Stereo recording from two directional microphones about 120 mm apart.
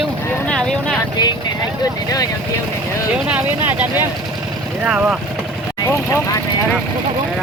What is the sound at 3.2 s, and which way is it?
Speech, 10° right (ahead or behind).